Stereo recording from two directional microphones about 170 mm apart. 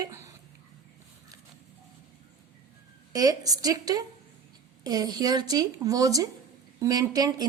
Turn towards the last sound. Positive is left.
turn(degrees=-25)  # may be behind; listen again after turning